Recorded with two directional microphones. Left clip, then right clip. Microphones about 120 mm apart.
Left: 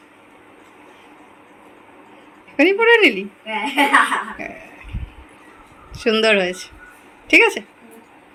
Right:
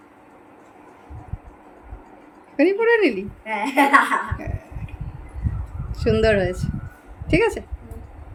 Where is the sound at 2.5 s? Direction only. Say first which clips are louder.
Left 4 dB; 5° right (ahead or behind).